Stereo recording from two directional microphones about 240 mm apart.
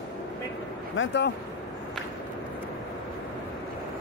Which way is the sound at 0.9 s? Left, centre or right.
Left.